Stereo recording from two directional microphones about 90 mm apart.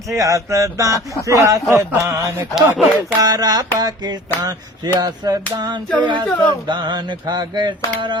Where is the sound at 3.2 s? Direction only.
45° right (ahead or behind).